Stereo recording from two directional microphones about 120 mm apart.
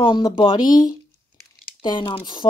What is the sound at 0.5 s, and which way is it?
Speech, 35° left (ahead or behind).